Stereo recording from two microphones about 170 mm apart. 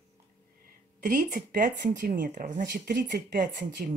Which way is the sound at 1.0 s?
55° right (ahead or behind).